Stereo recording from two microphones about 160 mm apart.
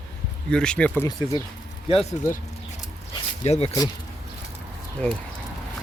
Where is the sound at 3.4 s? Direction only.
40° left (ahead or behind).